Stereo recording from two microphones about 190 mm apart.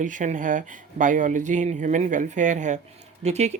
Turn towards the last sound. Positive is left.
turn(degrees=-35)  # may be behind; listen again after turning